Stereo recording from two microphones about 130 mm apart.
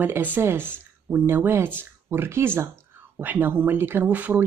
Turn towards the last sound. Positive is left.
turn(degrees=-10)  # may be behind; listen again after turning